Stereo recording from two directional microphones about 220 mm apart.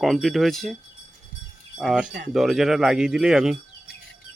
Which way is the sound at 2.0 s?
45° right (ahead or behind).